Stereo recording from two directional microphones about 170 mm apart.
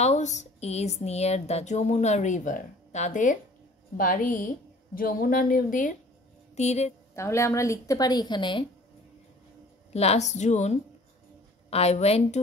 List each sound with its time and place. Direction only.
0.0 s speech: 40° left (ahead or behind)
6.5 s speech: 40° left (ahead or behind)
7.2 s a woman's voice: 15° left (ahead or behind)
9.9 s speech: 40° left (ahead or behind)